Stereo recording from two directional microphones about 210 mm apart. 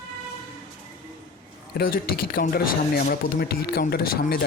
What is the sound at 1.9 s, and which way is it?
Speech, 45° left (ahead or behind).